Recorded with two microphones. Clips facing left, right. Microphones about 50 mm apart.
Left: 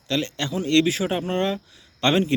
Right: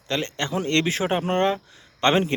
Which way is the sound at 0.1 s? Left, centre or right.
Right.